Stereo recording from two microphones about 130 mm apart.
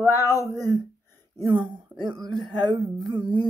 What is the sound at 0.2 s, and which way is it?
Speech, 25° left (ahead or behind).